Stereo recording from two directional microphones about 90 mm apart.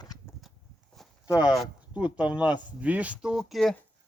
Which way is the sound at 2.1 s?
15° right (ahead or behind).